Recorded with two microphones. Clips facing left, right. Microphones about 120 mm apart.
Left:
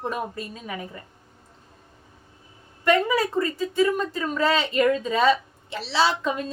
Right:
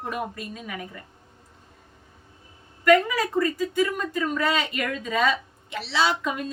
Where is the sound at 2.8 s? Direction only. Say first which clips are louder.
Right 1 dB; 30° left (ahead or behind).